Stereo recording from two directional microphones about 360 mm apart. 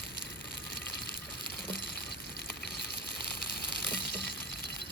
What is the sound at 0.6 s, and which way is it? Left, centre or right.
Water, left.